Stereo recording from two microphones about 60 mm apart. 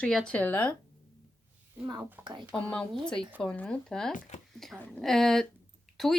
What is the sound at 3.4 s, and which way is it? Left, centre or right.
Speech, left.